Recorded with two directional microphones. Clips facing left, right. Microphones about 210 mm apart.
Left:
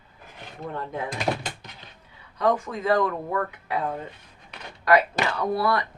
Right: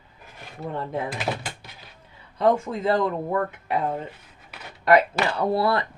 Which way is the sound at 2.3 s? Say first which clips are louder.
Right 3 dB; 25° right (ahead or behind).